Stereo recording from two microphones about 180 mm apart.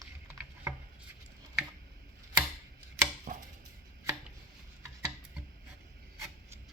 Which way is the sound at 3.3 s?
50° right (ahead or behind).